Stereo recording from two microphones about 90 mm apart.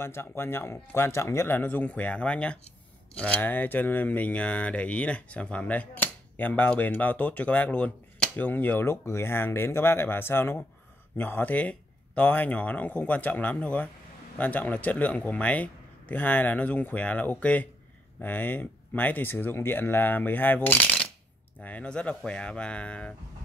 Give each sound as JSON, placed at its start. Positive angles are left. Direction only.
{"t": 0.0, "sound": "speech", "side_deg": 30}